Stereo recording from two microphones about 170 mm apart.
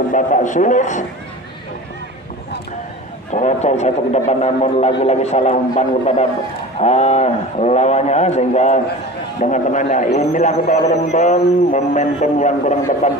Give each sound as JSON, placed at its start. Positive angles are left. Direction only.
{"t": 0.1, "sound": "a man's voice", "side_deg": 50}
{"t": 3.3, "sound": "a man's voice", "side_deg": 40}